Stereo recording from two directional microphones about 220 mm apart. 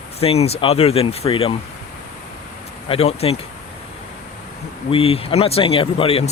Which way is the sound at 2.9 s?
25° left (ahead or behind).